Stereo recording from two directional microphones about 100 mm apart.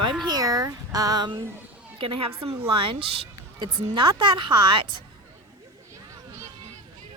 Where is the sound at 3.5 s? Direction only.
45° right (ahead or behind).